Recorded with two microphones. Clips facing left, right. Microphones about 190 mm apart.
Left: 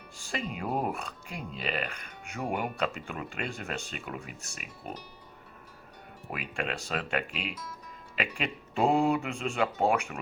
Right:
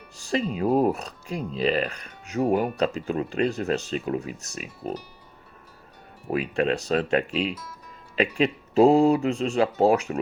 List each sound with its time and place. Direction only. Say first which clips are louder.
0.3 s speech: right 10 dB; 35° right (ahead or behind)
6.3 s speech: right 11 dB; 35° right (ahead or behind)
7.5 s speech: right 3 dB; 5° right (ahead or behind)
8.1 s speech: right 11 dB; 35° right (ahead or behind)